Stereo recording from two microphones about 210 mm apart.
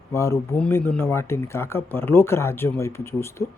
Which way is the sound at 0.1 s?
15° left (ahead or behind).